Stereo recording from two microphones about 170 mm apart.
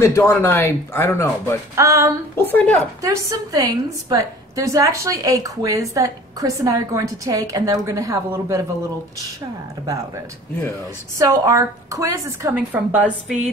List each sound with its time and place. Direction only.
0.0 s speech: 15° left (ahead or behind)
1.8 s a woman's voice: 15° right (ahead or behind)
2.3 s speech: 10° left (ahead or behind)
3.0 s a woman's voice: 20° right (ahead or behind)
11.1 s a woman's voice: 20° right (ahead or behind)